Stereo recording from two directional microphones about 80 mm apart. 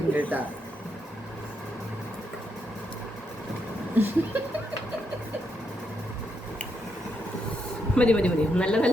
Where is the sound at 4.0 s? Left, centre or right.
Right.